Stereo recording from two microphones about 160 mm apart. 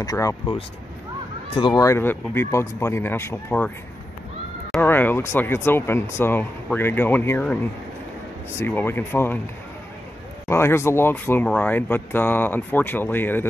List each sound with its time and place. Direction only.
0.0 s speech: 20° left (ahead or behind)
4.8 s speech: 15° left (ahead or behind)
10.5 s speech: 15° left (ahead or behind)